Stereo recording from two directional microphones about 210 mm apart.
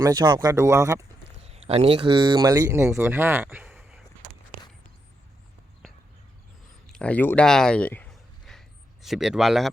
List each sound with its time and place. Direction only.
0.0 s speech: 20° right (ahead or behind)
1.4 s speech: 30° right (ahead or behind); by 4.0 s 5° right (ahead or behind)
6.8 s a sound: 5° left (ahead or behind)